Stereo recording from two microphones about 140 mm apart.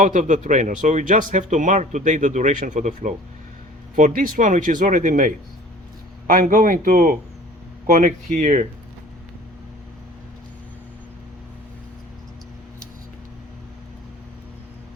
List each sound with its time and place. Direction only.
0.0 s speech: 60° right (ahead or behind)